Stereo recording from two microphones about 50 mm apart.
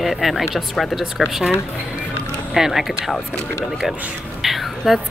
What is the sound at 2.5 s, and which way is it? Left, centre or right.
Speech, centre.